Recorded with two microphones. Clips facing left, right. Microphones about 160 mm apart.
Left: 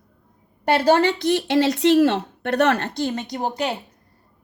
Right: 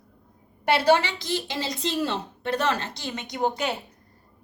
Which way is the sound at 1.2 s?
65° left (ahead or behind).